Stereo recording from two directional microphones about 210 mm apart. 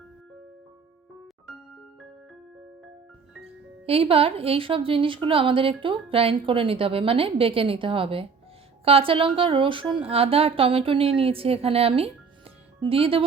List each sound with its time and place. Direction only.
3.4 s speech: 25° right (ahead or behind)